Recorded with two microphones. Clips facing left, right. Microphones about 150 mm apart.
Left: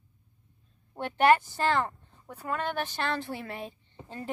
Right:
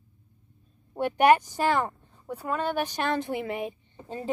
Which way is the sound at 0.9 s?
15° right (ahead or behind).